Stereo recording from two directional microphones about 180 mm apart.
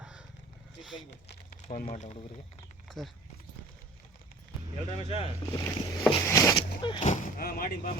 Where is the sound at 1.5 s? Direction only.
50° left (ahead or behind).